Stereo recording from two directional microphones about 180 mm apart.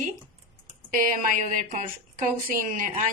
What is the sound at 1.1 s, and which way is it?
Speech, 45° right (ahead or behind).